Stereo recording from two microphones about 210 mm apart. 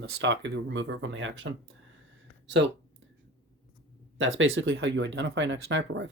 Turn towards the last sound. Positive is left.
turn(degrees=-60)  # may be behind; listen again after turning